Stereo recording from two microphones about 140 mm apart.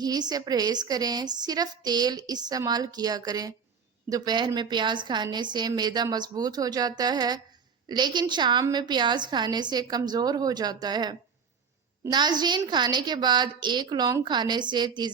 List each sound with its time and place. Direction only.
0.0 s a woman's voice: 30° right (ahead or behind)